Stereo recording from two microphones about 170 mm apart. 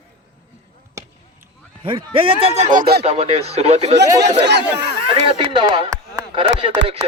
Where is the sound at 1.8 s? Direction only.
30° right (ahead or behind); by 3.0 s 60° right (ahead or behind).